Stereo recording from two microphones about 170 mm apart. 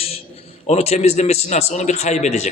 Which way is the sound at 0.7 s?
40° left (ahead or behind).